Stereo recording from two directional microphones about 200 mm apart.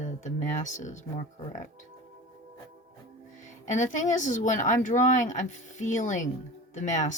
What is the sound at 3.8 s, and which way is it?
Speech, 40° left (ahead or behind).